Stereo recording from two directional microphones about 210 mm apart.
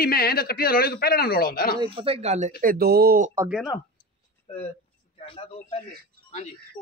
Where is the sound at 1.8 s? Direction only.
25° right (ahead or behind); by 3.3 s 45° right (ahead or behind).